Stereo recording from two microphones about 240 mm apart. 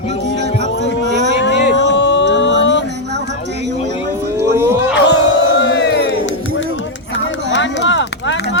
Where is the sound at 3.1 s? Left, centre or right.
Right.